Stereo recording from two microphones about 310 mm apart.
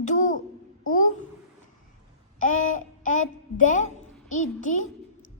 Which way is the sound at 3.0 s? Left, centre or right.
Left.